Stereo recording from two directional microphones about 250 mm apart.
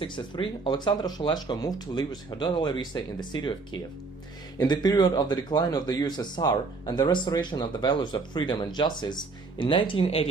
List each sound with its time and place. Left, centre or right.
0.0 s speech: centre
4.5 s speech: centre